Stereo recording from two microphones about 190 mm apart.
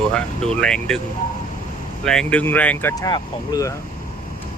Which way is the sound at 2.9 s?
20° left (ahead or behind).